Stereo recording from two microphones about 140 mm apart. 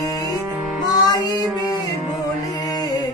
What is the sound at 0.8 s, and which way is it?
Music, 30° left (ahead or behind).